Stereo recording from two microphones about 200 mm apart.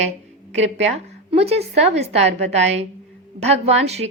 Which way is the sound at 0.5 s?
70° right (ahead or behind).